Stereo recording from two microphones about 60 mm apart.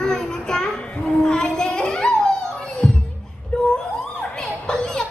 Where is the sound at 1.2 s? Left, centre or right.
Centre.